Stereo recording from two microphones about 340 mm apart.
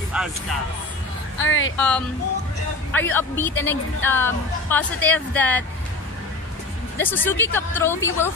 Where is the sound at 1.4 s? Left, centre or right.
Left.